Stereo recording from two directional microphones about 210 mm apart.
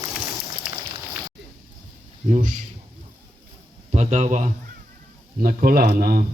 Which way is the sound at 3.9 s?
30° right (ahead or behind).